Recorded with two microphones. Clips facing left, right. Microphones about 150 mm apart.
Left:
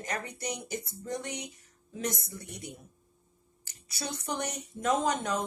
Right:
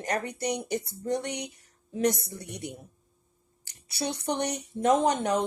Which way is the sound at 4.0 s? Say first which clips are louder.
Right 6 dB; 35° right (ahead or behind).